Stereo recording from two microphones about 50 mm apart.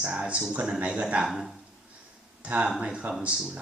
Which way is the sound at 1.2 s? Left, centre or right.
Centre.